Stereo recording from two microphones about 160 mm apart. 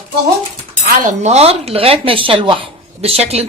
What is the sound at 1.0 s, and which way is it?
Speech, 45° right (ahead or behind).